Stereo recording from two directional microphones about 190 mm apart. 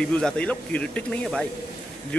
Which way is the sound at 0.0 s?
5° left (ahead or behind).